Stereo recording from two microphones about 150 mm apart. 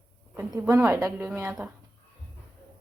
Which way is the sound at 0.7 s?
20° right (ahead or behind).